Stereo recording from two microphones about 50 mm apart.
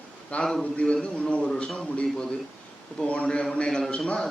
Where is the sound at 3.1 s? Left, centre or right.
Left.